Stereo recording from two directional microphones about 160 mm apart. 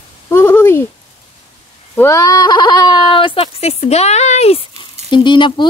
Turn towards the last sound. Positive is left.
turn(degrees=30)  # may be behind; listen again after turning